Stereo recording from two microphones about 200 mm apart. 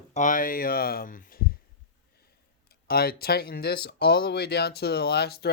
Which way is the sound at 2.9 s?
50° left (ahead or behind).